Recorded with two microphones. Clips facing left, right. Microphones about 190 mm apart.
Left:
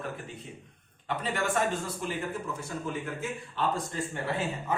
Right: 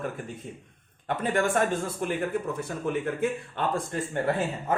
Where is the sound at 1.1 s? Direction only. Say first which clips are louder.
Right 5 dB; 50° right (ahead or behind).